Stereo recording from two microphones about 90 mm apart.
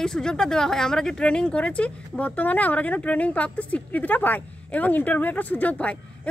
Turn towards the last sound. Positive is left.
turn(degrees=15)  # may be behind; listen again after turning